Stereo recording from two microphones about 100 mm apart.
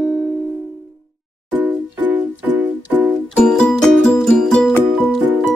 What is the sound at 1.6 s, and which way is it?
Music, 20° right (ahead or behind).